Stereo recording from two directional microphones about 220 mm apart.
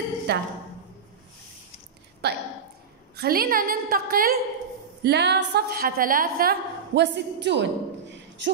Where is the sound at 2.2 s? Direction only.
50° right (ahead or behind).